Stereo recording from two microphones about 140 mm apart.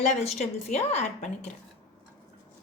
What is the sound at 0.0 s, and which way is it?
A woman's voice, 55° left (ahead or behind).